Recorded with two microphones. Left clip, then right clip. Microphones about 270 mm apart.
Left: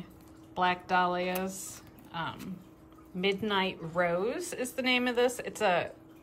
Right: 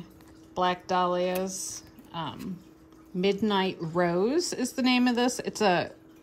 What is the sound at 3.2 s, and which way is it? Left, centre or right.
Speech, centre.